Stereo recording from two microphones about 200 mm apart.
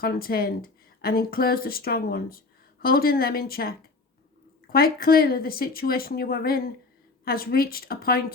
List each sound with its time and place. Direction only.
0.0 s speech: 50° left (ahead or behind)